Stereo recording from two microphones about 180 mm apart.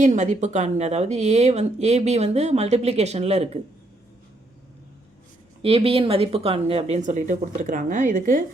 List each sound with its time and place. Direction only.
0.0 s speech: 40° right (ahead or behind)
5.6 s speech: 30° right (ahead or behind); by 8.4 s 45° right (ahead or behind)